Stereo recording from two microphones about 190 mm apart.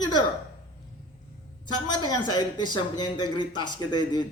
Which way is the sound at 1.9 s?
25° left (ahead or behind).